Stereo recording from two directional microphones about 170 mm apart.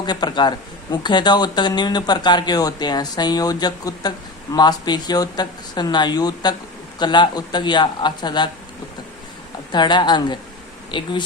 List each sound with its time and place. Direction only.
0.0 s a man's voice: 25° left (ahead or behind)
9.7 s a man's voice: 25° left (ahead or behind)